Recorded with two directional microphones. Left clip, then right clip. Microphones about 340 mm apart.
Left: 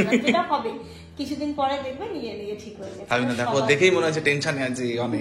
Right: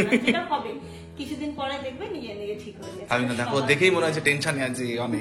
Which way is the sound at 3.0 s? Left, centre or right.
Centre.